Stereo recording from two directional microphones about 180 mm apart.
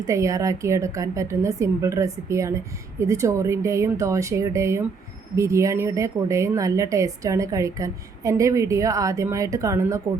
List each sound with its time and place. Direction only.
0.0 s a woman's voice: 15° right (ahead or behind)